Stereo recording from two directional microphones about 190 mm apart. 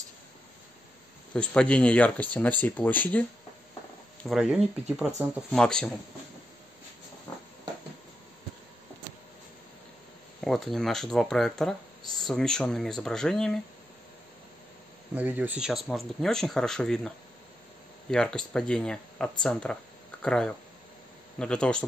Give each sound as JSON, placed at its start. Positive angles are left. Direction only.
{"t": 1.3, "sound": "speech", "side_deg": 5}
{"t": 10.4, "sound": "speech", "side_deg": 0}
{"t": 15.1, "sound": "speech", "side_deg": -10}
{"t": 18.1, "sound": "speech", "side_deg": 5}